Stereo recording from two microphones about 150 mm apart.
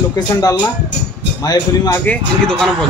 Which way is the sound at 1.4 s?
25° left (ahead or behind).